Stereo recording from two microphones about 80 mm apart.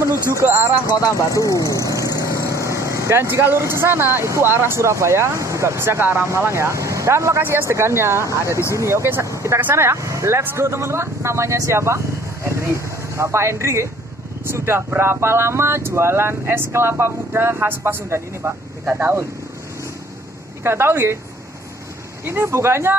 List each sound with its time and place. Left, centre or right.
0.3 s speech: right
1.0 s speech: left
1.7 s vehicle: left
2.3 s speech: right
9.6 s speech: right
20.6 s speech: right
22.2 s speech: right